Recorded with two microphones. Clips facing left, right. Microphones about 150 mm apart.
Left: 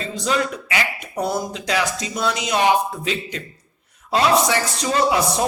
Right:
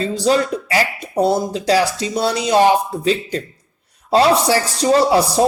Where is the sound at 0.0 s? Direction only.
35° right (ahead or behind).